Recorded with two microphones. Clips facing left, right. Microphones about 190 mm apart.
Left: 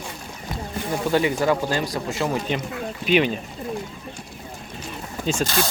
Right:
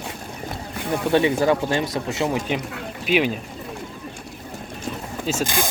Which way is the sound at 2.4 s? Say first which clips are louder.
Even; 10° right (ahead or behind).